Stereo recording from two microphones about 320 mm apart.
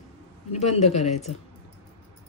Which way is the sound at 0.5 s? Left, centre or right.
Left.